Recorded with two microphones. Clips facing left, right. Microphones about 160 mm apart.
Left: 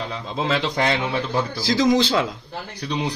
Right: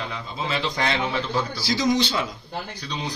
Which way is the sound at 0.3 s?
90° left.